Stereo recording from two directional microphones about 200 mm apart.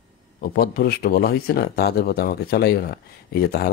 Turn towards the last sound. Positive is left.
turn(degrees=50)  # may be behind; listen again after turning